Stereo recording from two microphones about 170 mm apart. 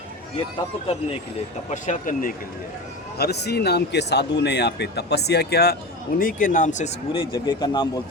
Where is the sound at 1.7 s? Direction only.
50° left (ahead or behind).